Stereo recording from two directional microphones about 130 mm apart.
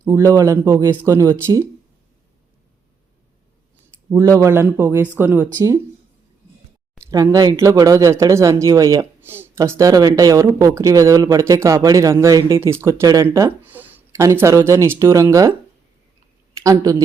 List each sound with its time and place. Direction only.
0.0 s speech: 20° right (ahead or behind)
4.1 s speech: 25° right (ahead or behind)
7.0 s speech: 25° right (ahead or behind)
9.2 s speech: 15° right (ahead or behind)
13.6 s a sound: 15° right (ahead or behind)
14.3 s speech: 25° right (ahead or behind)
16.6 s speech: 25° right (ahead or behind)